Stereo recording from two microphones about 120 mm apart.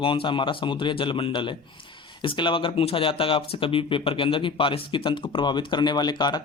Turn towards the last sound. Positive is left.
turn(degrees=35)  # may be behind; listen again after turning